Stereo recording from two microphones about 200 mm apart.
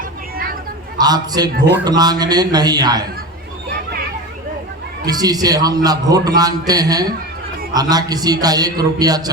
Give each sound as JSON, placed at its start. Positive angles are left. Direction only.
{"t": 0.9, "sound": "a man's voice", "side_deg": -20}
{"t": 5.0, "sound": "a man's voice", "side_deg": -20}